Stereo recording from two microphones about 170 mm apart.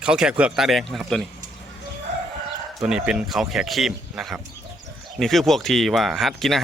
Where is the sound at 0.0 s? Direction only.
5° right (ahead or behind).